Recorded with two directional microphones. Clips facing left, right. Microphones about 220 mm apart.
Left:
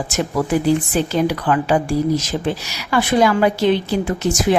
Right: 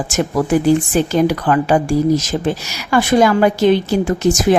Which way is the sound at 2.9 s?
45° right (ahead or behind).